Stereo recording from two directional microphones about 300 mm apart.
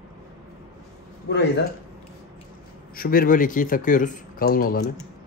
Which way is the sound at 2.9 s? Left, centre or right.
Left.